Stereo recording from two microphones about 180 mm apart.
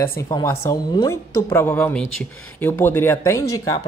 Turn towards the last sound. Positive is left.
turn(degrees=20)  # may be behind; listen again after turning